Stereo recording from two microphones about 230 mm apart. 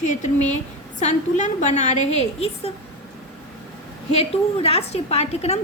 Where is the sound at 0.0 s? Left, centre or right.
Left.